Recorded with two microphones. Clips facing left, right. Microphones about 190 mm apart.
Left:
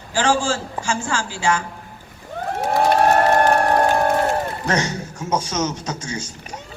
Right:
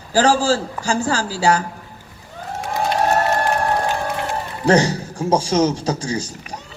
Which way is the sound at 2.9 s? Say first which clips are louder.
Left 2 dB; 55° left (ahead or behind).